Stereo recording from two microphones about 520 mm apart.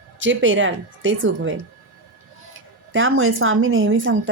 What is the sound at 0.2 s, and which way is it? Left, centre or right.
Speech, right.